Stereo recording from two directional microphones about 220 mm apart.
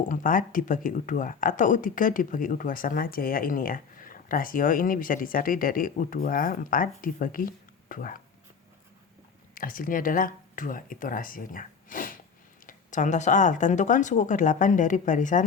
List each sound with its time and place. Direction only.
0.1 s speech: 35° left (ahead or behind)
9.6 s speech: 40° left (ahead or behind)